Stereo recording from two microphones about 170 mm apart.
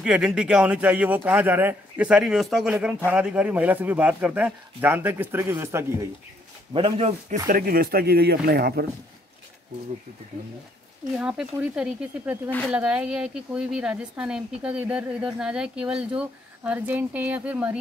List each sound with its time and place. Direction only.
0.0 s speech: 5° right (ahead or behind)
6.7 s a man's voice: 35° right (ahead or behind)
7.4 s speech: 55° right (ahead or behind)
11.1 s speech: 5° right (ahead or behind)
12.4 s speech: 10° left (ahead or behind)
12.7 s speech: 5° right (ahead or behind)